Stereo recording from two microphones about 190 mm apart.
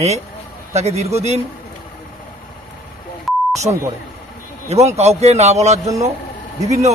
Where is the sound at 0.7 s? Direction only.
35° right (ahead or behind).